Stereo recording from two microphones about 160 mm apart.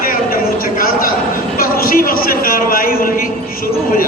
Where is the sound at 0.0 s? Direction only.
65° left (ahead or behind).